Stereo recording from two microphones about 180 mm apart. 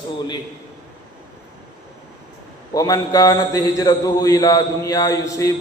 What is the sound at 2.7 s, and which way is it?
A man's voice, 20° left (ahead or behind).